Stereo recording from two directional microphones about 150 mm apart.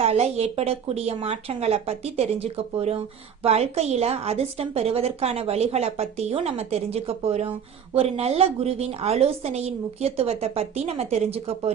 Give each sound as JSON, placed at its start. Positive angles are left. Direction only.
{"t": 0.0, "sound": "a woman's voice", "side_deg": -45}